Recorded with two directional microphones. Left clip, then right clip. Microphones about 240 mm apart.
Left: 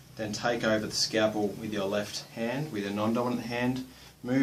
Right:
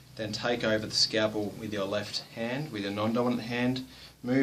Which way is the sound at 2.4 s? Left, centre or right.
Centre.